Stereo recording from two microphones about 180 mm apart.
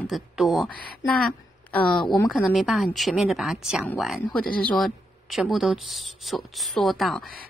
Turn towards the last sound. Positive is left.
turn(degrees=0)  # may be behind; listen again after turning